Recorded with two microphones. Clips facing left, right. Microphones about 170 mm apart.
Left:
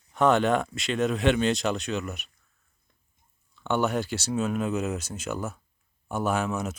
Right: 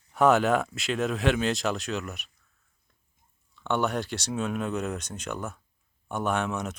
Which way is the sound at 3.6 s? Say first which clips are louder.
Left 2 dB; centre (ahead or behind).